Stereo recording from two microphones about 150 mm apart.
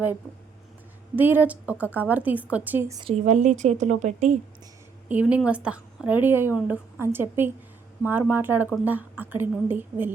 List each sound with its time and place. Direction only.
1.1 s a woman's voice: 10° right (ahead or behind)
3.0 s a woman's voice: 45° right (ahead or behind)
5.0 s a woman's voice: 10° right (ahead or behind)